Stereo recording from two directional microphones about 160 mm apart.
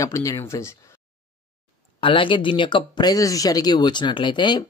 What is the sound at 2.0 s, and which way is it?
Speech, 30° left (ahead or behind).